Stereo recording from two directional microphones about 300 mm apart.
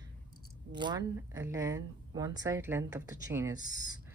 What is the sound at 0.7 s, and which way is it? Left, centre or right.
A woman's voice, centre.